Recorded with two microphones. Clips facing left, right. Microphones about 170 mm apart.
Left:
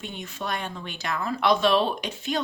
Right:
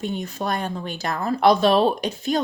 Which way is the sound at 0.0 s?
40° right (ahead or behind).